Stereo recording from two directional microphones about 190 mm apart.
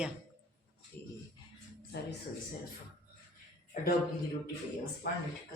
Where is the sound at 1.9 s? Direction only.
60° left (ahead or behind).